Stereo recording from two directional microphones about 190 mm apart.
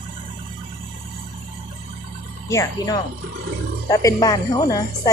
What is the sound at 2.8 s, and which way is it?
A woman's voice, 20° left (ahead or behind).